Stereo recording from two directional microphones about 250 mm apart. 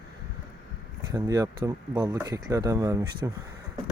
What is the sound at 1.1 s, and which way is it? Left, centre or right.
Speech, centre.